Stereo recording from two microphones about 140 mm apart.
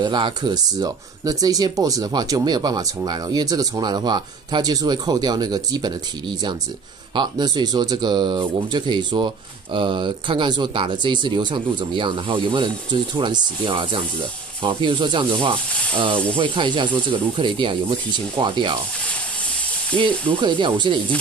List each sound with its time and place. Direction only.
0.0 s speech: 35° right (ahead or behind)
19.9 s speech: 10° left (ahead or behind)
20.2 s speech: 35° right (ahead or behind)